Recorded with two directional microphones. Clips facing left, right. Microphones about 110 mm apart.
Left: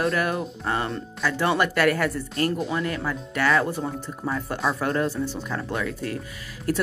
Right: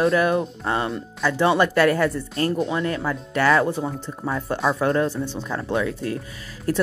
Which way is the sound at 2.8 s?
30° right (ahead or behind).